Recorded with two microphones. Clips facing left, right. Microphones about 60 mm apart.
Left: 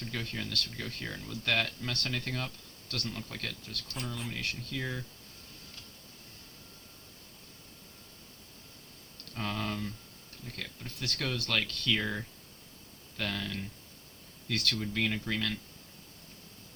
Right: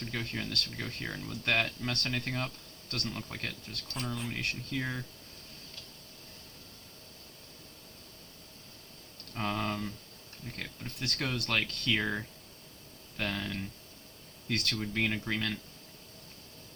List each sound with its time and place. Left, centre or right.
0.0 s speech: centre
3.2 s speech: centre
3.9 s speech: centre
4.4 s speech: centre
9.3 s speech: centre
14.4 s speech: right
14.8 s speech: centre